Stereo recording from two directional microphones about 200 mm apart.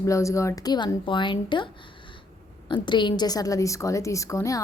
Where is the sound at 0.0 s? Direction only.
15° left (ahead or behind).